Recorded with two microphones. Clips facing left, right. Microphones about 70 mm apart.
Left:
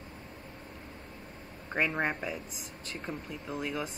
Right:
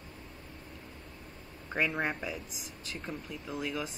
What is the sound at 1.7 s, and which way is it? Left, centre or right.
Speech, centre.